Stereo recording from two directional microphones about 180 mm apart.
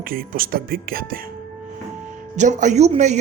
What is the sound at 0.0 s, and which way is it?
Speech, 55° right (ahead or behind).